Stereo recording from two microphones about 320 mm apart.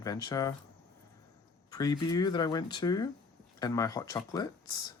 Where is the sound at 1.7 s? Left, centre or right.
Centre.